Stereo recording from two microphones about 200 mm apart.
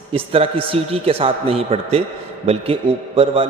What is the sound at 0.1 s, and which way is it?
A man's voice, 30° right (ahead or behind).